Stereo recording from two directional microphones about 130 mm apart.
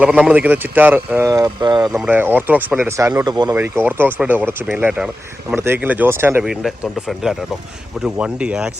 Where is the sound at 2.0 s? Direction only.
15° right (ahead or behind); by 3.5 s 30° right (ahead or behind).